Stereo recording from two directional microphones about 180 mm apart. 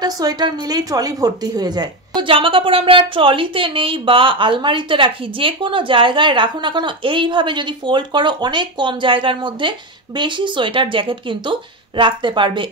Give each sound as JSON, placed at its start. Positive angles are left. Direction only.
{"t": 0.0, "sound": "a woman's voice", "side_deg": -20}